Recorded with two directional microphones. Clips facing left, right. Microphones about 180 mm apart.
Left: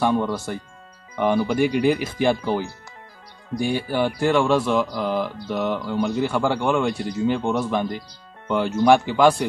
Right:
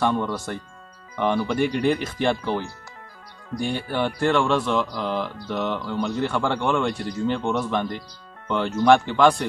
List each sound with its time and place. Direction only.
0.0 s speech: 10° left (ahead or behind)